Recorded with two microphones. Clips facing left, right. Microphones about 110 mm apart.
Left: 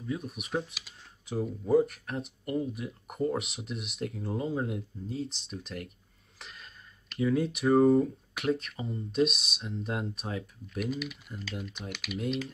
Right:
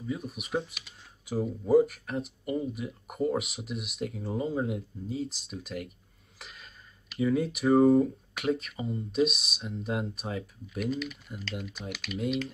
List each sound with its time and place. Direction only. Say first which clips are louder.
0.0 s speech: even; centre (ahead or behind)